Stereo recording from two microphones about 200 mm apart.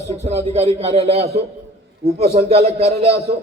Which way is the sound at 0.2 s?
35° right (ahead or behind).